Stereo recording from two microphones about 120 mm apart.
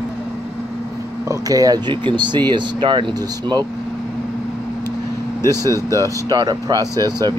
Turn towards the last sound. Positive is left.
turn(degrees=-35)  # may be behind; listen again after turning